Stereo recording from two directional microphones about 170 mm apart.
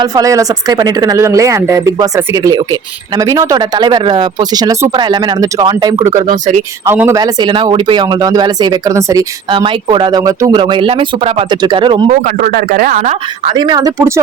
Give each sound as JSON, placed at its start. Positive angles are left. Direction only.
{"t": 0.0, "sound": "speech", "side_deg": -20}
{"t": 7.2, "sound": "speech", "side_deg": -25}
{"t": 9.5, "sound": "speech", "side_deg": -30}
{"t": 12.4, "sound": "speech", "side_deg": -55}
{"t": 13.1, "sound": "speech", "side_deg": -35}